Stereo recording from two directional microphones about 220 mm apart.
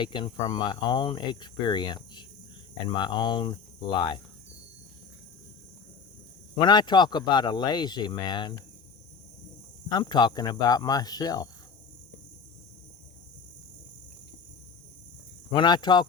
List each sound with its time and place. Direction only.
0.0 s speech: 20° left (ahead or behind)
6.6 s speech: 20° left (ahead or behind)
9.9 s speech: 20° left (ahead or behind)
15.5 s speech: 20° left (ahead or behind)